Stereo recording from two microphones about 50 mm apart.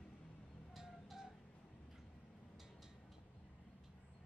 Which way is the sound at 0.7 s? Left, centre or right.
Centre.